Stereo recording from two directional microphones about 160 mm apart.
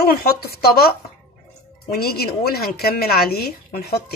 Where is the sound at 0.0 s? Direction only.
75° left (ahead or behind).